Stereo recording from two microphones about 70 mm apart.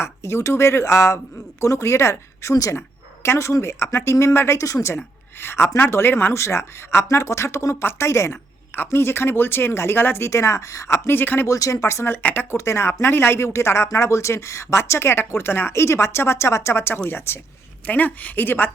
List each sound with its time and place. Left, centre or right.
0.0 s speech: left
5.4 s speech: left
11.4 s speech: left
12.5 s speech: left
17.8 s a woman's voice: left